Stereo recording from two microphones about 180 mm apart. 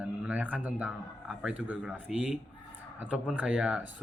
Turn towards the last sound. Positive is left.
turn(degrees=-5)  # may be behind; listen again after turning